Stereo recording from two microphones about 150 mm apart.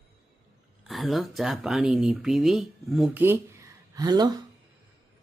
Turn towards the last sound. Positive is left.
turn(degrees=-25)  # may be behind; listen again after turning